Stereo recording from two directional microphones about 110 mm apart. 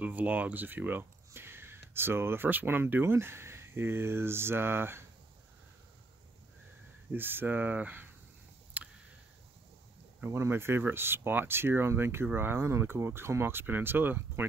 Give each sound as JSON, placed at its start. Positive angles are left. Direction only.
{"t": 0.0, "sound": "speech", "side_deg": -15}
{"t": 7.1, "sound": "speech", "side_deg": -20}
{"t": 8.8, "sound": "a sound", "side_deg": -15}
{"t": 10.2, "sound": "speech", "side_deg": -20}